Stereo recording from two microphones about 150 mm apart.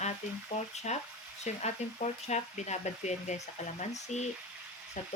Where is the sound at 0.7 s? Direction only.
50° left (ahead or behind).